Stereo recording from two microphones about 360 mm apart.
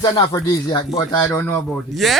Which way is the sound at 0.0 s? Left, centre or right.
Centre.